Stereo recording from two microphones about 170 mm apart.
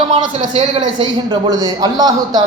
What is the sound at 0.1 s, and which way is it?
Speech, 40° right (ahead or behind).